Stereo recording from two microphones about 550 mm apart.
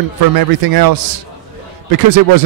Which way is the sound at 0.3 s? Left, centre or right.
Right.